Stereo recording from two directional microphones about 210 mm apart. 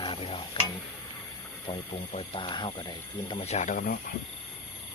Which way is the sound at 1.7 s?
25° left (ahead or behind).